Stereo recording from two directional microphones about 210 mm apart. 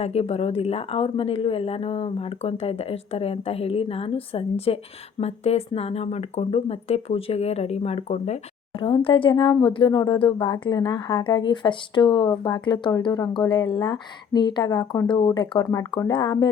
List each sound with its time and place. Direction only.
0.0 s speech: 30° left (ahead or behind)